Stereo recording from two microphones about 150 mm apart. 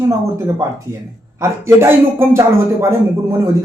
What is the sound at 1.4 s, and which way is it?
A man's voice, 15° right (ahead or behind).